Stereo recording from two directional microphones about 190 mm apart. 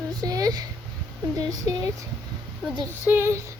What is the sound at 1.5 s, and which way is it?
A child's voice, 20° right (ahead or behind).